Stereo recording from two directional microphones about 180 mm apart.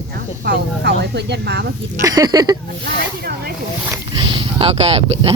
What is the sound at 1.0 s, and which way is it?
Speech, 70° right (ahead or behind).